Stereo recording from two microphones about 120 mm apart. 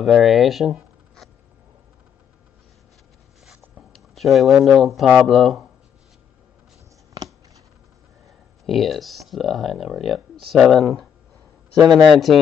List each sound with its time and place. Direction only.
0.0 s speech: centre (ahead or behind)
3.9 s speech: centre (ahead or behind)
8.6 s speech: centre (ahead or behind)
11.9 s speech: 30° right (ahead or behind)